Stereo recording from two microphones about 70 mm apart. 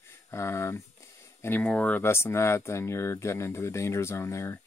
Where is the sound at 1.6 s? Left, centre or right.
Centre.